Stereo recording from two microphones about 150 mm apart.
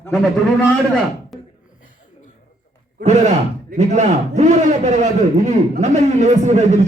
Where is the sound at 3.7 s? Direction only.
50° right (ahead or behind).